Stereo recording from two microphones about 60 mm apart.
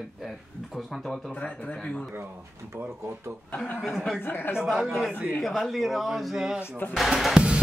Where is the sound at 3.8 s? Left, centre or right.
Centre.